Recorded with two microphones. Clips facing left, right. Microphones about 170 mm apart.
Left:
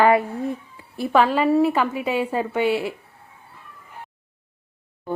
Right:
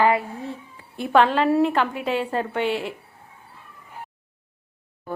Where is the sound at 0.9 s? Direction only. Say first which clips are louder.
Even; 5° left (ahead or behind).